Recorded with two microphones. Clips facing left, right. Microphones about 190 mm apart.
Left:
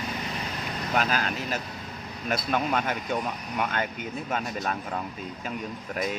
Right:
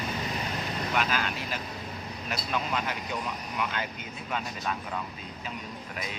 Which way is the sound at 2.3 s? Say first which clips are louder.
Left 5 dB; 50° left (ahead or behind).